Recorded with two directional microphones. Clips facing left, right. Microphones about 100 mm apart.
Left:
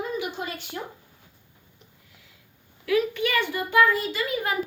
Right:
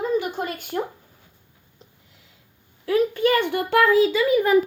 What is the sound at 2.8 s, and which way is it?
Speech, 40° right (ahead or behind).